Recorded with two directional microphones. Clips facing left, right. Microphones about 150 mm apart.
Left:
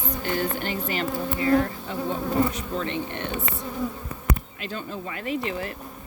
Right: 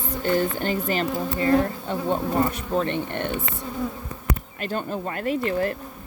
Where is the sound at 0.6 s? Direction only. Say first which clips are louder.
Right 4 dB; 40° right (ahead or behind).